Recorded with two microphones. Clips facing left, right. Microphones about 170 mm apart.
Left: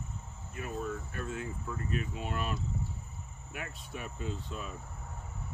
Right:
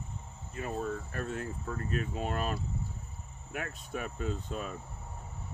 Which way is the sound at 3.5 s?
50° right (ahead or behind).